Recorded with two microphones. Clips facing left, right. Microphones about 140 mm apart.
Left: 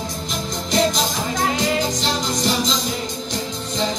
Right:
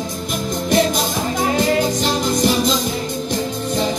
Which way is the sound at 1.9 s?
55° right (ahead or behind).